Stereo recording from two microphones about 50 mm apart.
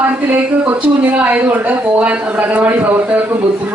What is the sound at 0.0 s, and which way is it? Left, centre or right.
A woman's voice, right.